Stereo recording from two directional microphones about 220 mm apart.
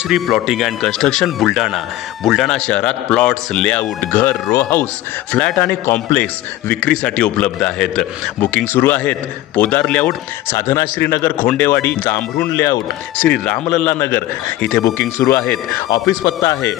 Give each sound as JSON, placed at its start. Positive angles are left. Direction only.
{"t": 0.1, "sound": "a man's voice", "side_deg": 0}